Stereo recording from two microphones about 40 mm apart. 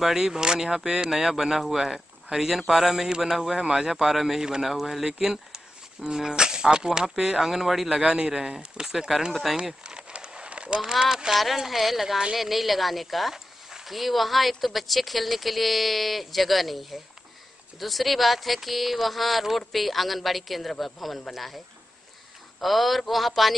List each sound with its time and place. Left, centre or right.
0.0 s speech: centre
7.9 s a man's voice: right; by 9.6 s centre
9.8 s crumpling: right
10.8 s speech: centre
22.6 s speech: centre